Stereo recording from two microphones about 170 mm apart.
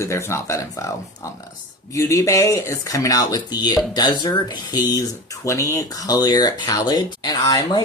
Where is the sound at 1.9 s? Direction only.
20° left (ahead or behind).